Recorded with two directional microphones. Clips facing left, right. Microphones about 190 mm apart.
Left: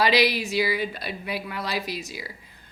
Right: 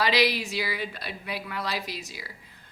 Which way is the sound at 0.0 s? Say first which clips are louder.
Left 3 dB; 10° left (ahead or behind).